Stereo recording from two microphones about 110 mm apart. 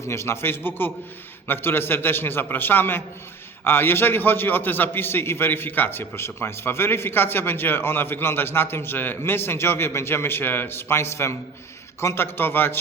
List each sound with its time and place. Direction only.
0.0 s a man's voice: 25° left (ahead or behind)